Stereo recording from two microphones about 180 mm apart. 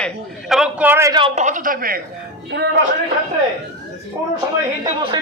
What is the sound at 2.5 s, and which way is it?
Speech, 75° right (ahead or behind).